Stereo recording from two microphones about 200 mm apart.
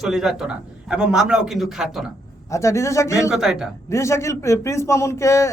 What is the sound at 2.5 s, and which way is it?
Speech, 15° left (ahead or behind).